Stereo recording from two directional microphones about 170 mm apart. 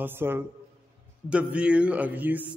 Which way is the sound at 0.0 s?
15° right (ahead or behind).